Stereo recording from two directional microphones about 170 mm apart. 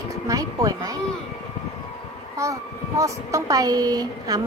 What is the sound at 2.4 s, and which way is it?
A woman's voice, 20° right (ahead or behind).